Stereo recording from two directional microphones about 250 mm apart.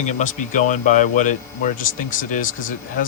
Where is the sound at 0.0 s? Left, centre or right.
Left.